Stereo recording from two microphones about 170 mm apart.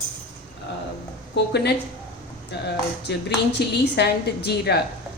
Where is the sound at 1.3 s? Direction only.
80° left.